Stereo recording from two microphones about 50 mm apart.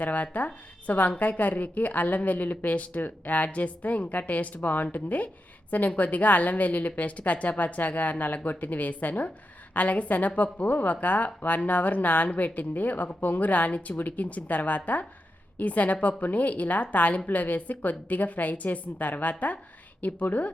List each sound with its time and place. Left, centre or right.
0.0 s a woman's voice: left